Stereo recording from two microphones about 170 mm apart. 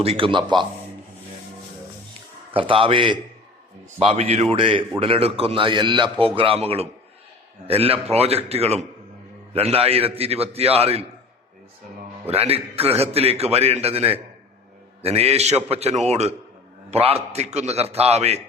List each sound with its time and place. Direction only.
0.0 s a man's voice: 35° right (ahead or behind)
2.5 s a man's voice: 30° right (ahead or behind)
12.3 s a man's voice: 35° right (ahead or behind)